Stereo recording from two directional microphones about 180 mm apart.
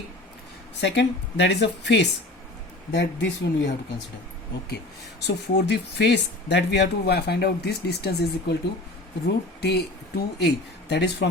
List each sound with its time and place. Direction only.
0.8 s speech: 75° left (ahead or behind)
5.2 s speech: 70° left (ahead or behind)